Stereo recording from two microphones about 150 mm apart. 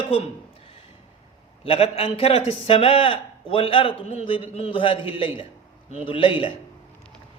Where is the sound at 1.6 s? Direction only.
40° left (ahead or behind).